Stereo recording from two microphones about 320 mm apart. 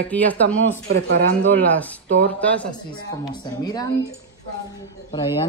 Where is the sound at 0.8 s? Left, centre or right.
Right.